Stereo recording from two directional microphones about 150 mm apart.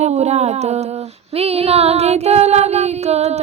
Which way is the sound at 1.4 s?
40° right (ahead or behind).